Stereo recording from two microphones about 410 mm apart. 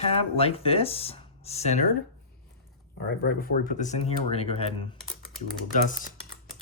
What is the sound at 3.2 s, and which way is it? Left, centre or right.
Speech, centre.